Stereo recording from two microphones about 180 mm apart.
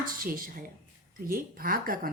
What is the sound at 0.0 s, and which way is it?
A woman's voice, 50° right (ahead or behind).